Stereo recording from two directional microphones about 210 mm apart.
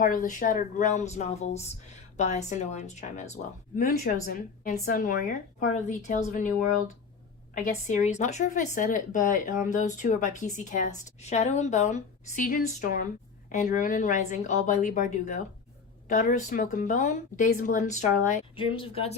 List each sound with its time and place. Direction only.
0.0 s a woman's voice: 40° left (ahead or behind)
7.5 s a woman's voice: 35° left (ahead or behind)